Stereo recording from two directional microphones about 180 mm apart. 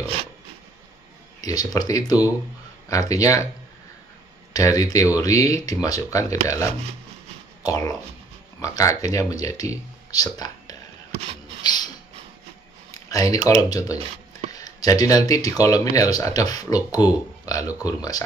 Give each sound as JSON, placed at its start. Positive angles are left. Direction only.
{"t": 1.4, "sound": "speech", "side_deg": 20}
{"t": 4.6, "sound": "speech", "side_deg": 20}
{"t": 11.6, "sound": "a sound", "side_deg": 25}
{"t": 13.1, "sound": "speech", "side_deg": 20}